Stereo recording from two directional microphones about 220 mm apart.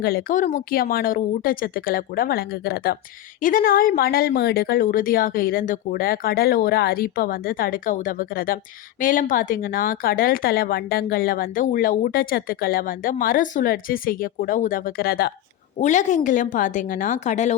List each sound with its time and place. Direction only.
0.0 s a woman's voice: 45° left (ahead or behind)